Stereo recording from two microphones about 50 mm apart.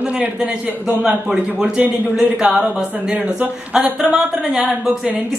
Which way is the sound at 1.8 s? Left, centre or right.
Right.